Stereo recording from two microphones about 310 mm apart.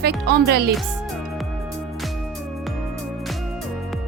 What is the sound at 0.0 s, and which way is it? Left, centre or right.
Speech, right.